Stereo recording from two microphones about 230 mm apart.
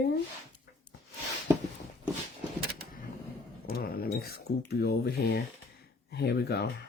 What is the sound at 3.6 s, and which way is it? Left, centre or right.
Speech, left.